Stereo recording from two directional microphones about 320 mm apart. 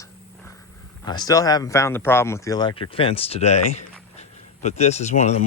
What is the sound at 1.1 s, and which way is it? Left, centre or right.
Speech, centre.